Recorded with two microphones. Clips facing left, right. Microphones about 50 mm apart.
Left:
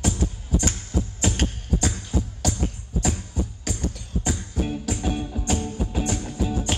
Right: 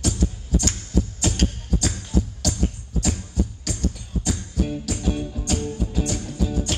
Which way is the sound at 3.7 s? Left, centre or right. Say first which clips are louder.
Right 1 dB; left.